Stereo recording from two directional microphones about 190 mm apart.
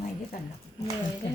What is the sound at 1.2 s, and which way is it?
Music, 65° left (ahead or behind).